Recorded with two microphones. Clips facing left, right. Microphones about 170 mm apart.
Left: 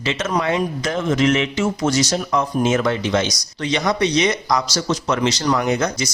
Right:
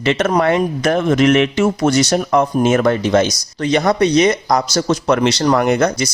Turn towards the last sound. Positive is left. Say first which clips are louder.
# right 5 dB
turn(degrees=-60)  # may be behind; listen again after turning